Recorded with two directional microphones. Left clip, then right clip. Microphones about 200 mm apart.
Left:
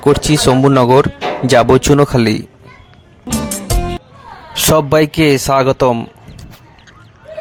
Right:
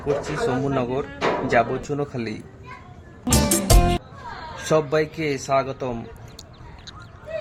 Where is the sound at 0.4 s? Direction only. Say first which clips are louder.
Left 15 dB; 50° left (ahead or behind).